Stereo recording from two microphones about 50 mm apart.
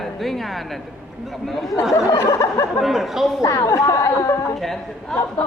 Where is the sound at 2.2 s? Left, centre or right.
Left.